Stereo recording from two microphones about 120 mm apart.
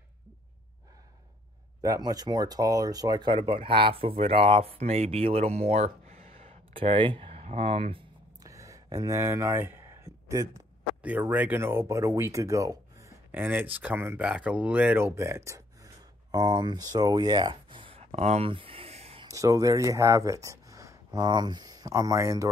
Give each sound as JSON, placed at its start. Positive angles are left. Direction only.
{"t": 1.8, "sound": "speech", "side_deg": -30}
{"t": 8.5, "sound": "a sound", "side_deg": -25}
{"t": 8.8, "sound": "speech", "side_deg": -30}
{"t": 11.0, "sound": "speech", "side_deg": -15}
{"t": 13.3, "sound": "speech", "side_deg": -15}
{"t": 18.5, "sound": "a sound", "side_deg": -50}
{"t": 19.2, "sound": "speech", "side_deg": -30}